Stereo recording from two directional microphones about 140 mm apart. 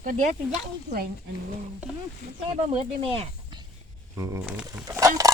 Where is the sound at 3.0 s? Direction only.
40° right (ahead or behind).